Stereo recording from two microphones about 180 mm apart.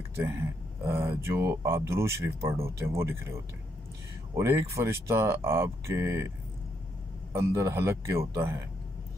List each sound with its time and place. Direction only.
0.8 s speech: 15° right (ahead or behind)
4.4 s speech: 15° right (ahead or behind)
7.3 s speech: 15° right (ahead or behind)